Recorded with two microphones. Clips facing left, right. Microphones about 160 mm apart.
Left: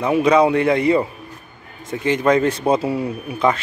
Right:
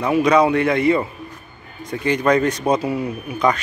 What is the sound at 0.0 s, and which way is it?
Speech, 25° left (ahead or behind).